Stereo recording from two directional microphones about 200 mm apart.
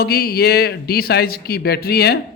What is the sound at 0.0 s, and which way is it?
A man's voice, 50° left (ahead or behind).